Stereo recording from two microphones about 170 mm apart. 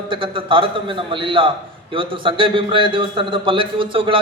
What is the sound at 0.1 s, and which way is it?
A man's voice, 30° right (ahead or behind).